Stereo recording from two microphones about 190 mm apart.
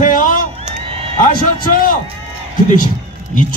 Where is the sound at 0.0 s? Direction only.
45° left (ahead or behind).